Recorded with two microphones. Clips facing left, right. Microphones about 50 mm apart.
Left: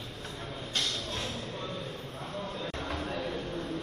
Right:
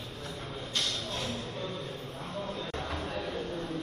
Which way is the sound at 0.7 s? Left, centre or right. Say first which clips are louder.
Even; left.